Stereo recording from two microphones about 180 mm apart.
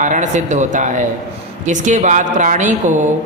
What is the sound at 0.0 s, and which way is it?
Speech, 45° right (ahead or behind).